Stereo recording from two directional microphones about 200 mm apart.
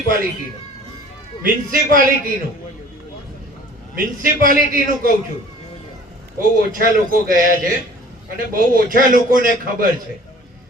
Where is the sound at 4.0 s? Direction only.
45° right (ahead or behind).